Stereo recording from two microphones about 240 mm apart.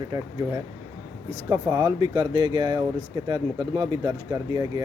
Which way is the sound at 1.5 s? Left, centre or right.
Centre.